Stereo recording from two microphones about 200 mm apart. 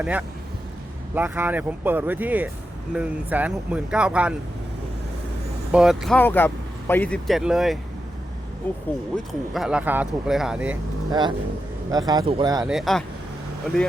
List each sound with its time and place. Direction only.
0.0 s speech: 5° right (ahead or behind)
5.7 s speech: centre (ahead or behind)
6.1 s speech: 10° left (ahead or behind)
8.7 s speech: 10° left (ahead or behind)
9.5 s speech: 5° right (ahead or behind)
11.1 s speech: 20° right (ahead or behind)
12.6 s speech: centre (ahead or behind)